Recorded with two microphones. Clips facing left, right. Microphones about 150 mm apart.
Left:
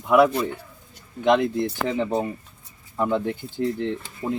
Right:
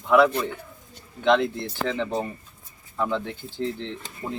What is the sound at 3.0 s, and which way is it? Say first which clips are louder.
Speech: left 4 dB; 10° left (ahead or behind).